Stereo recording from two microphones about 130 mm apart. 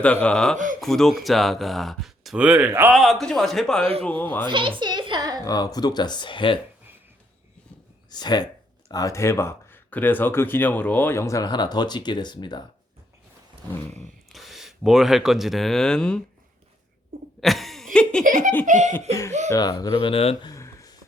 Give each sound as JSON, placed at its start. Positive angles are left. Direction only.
{"t": 0.0, "sound": "speech", "side_deg": 10}
{"t": 0.5, "sound": "speech", "side_deg": -80}
{"t": 0.8, "sound": "speech", "side_deg": 0}
{"t": 2.9, "sound": "speech", "side_deg": 0}
{"t": 4.4, "sound": "a woman's voice", "side_deg": -40}
{"t": 4.8, "sound": "a sound", "side_deg": -35}
{"t": 5.5, "sound": "speech", "side_deg": 30}
{"t": 8.1, "sound": "speech", "side_deg": 35}
{"t": 14.0, "sound": "speech", "side_deg": 0}
{"t": 17.4, "sound": "a sound", "side_deg": 0}
{"t": 18.6, "sound": "speech", "side_deg": -70}
{"t": 19.5, "sound": "speech", "side_deg": 30}
{"t": 20.5, "sound": "a sound", "side_deg": 25}